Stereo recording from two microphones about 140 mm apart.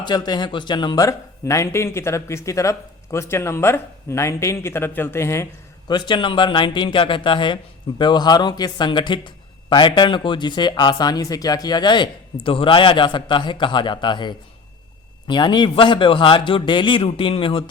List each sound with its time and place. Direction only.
0.0 s speech: 30° left (ahead or behind)
5.9 s speech: 35° left (ahead or behind)